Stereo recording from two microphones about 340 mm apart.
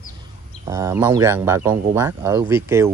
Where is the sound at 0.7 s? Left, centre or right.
Centre.